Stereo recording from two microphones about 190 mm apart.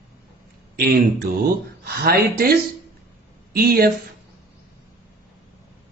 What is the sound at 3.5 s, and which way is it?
Speech, 50° right (ahead or behind).